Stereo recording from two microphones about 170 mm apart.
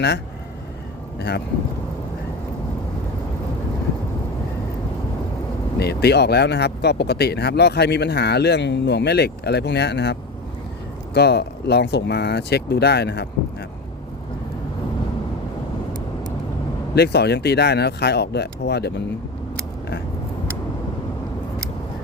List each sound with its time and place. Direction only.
5.8 s speech: 70° left (ahead or behind)
16.9 s speech: 75° left (ahead or behind)